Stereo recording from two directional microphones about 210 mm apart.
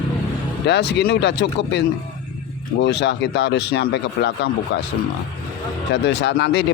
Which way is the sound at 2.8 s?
55° left (ahead or behind).